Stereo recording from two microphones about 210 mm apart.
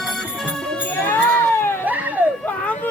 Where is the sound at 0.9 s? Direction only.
10° left (ahead or behind).